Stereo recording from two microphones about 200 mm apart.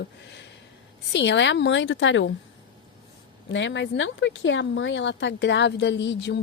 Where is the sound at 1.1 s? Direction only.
60° left (ahead or behind).